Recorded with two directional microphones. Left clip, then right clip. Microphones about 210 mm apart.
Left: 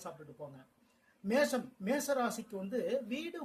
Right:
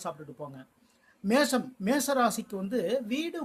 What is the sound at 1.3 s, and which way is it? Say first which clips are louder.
Speech: right 6 dB; 35° right (ahead or behind).